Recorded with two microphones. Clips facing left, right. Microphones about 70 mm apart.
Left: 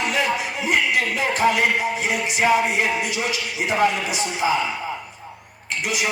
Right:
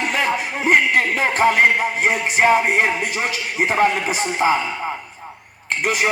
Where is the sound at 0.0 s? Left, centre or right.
Right.